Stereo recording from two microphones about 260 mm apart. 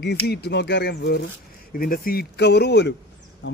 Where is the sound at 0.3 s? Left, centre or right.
Left.